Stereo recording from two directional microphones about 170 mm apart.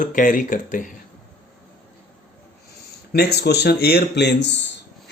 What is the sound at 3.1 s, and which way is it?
Speech, 70° left (ahead or behind).